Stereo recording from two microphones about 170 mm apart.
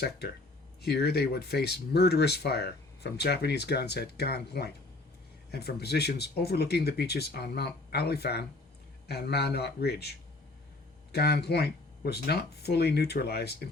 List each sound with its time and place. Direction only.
0.8 s speech: 70° left (ahead or behind)